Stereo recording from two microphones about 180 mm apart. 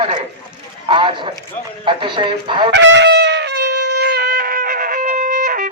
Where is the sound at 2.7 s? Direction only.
85° right.